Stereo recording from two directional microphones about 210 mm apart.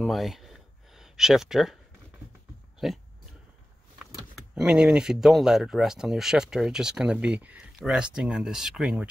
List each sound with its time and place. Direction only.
0.0 s a sound: centre (ahead or behind)
2.8 s speech: centre (ahead or behind)
4.0 s speech: 5° right (ahead or behind)